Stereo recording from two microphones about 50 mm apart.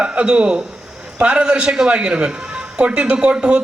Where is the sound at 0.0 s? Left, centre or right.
Right.